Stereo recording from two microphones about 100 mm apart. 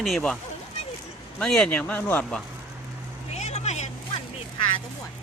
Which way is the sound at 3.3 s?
90° left.